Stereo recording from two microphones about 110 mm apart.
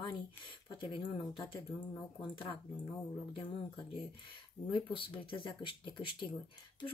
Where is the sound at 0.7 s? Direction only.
50° left (ahead or behind).